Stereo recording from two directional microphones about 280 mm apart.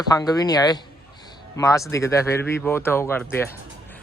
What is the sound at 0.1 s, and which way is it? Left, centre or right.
Speech, centre.